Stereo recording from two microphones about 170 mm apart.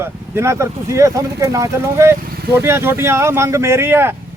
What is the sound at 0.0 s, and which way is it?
Speech, 15° right (ahead or behind).